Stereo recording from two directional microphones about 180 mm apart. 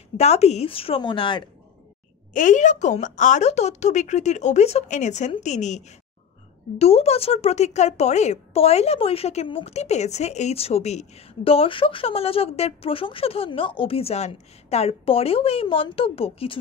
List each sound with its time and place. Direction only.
0.2 s speech: 35° left (ahead or behind)
2.3 s speech: 45° left (ahead or behind)